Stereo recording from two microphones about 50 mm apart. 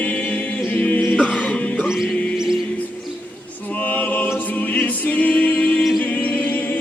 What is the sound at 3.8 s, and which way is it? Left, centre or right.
Choir, left.